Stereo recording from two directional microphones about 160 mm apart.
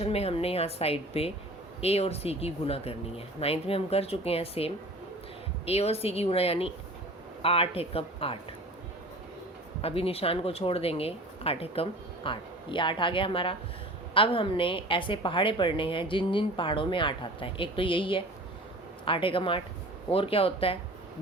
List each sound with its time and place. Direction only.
0.0 s a woman's voice: 40° left (ahead or behind)
9.8 s a woman's voice: 35° left (ahead or behind)